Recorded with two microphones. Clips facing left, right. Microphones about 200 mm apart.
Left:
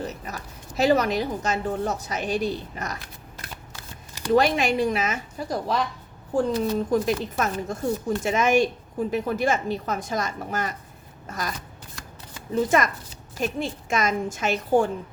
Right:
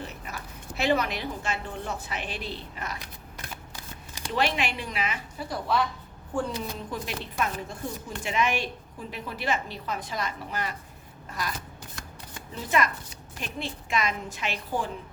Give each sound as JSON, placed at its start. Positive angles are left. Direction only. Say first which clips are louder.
{"t": 0.0, "sound": "a woman's voice", "louder": "left 6 dB", "side_deg": 40}
{"t": 4.3, "sound": "a woman's voice", "louder": "left 8 dB", "side_deg": 40}
{"t": 11.3, "sound": "a sound", "louder": "left 3 dB", "side_deg": 45}
{"t": 12.6, "sound": "a woman's voice", "louder": "even", "side_deg": 45}